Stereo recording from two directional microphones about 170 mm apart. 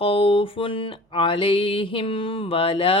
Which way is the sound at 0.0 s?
30° left (ahead or behind).